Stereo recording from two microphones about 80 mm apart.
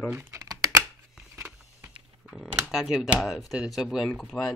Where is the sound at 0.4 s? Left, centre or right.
Right.